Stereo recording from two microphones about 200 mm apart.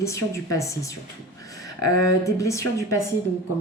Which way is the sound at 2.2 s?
15° left (ahead or behind).